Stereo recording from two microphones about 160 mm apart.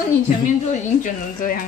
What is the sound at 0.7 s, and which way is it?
Speech, 55° left (ahead or behind).